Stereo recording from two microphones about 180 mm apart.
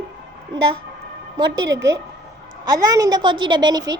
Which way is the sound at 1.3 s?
25° right (ahead or behind).